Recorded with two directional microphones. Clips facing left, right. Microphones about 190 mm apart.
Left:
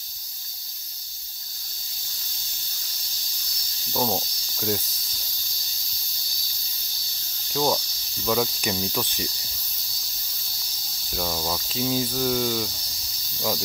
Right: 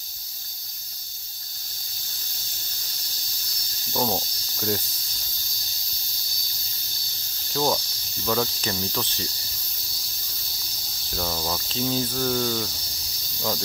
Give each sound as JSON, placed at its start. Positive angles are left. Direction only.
{"t": 3.9, "sound": "speech", "side_deg": 0}
{"t": 7.5, "sound": "cricket", "side_deg": 0}
{"t": 11.1, "sound": "cricket", "side_deg": 5}